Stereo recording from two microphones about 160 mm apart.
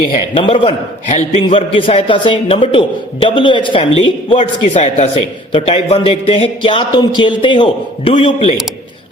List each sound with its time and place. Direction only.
0.4 s a man's voice: 35° left (ahead or behind)
1.0 s a man's voice: 50° left (ahead or behind)
1.5 s a man's voice: 35° left (ahead or behind)